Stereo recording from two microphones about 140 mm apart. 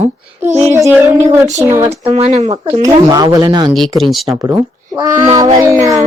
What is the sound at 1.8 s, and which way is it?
Speech, 45° right (ahead or behind).